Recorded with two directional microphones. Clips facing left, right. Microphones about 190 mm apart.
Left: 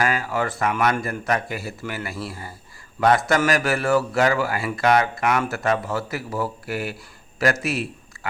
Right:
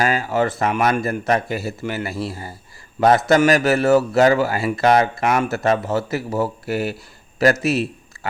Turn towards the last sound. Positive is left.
turn(degrees=-25)  # may be behind; listen again after turning